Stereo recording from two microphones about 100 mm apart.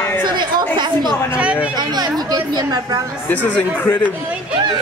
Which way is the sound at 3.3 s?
15° left (ahead or behind).